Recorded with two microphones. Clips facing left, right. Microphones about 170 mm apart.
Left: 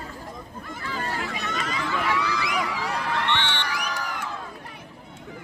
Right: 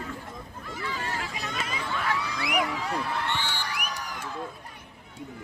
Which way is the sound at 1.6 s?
90° left.